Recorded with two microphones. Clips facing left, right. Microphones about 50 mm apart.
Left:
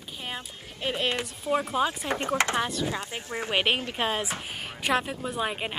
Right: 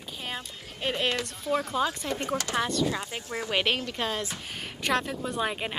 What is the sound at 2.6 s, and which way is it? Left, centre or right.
Speech, centre.